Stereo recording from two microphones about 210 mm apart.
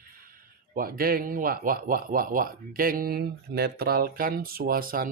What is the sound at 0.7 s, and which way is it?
Speech, 45° right (ahead or behind).